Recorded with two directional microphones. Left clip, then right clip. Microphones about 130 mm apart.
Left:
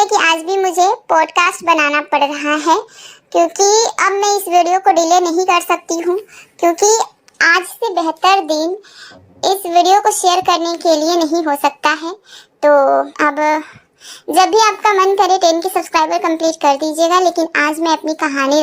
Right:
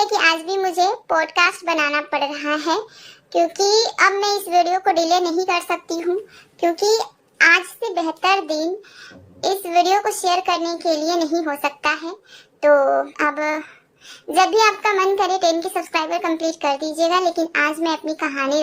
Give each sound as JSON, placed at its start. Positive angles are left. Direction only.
{"t": 0.0, "sound": "a child's voice", "side_deg": 30}